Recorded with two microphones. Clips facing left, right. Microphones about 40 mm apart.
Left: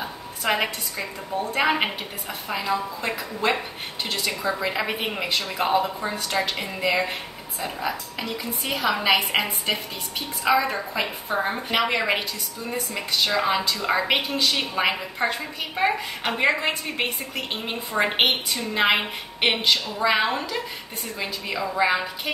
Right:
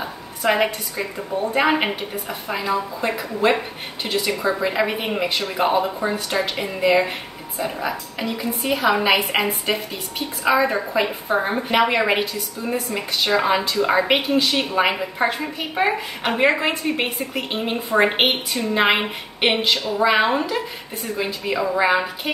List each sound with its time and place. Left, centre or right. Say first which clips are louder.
0.0 s a woman's voice: right 5 dB; centre
6.3 s a woman's voice: right 3 dB; centre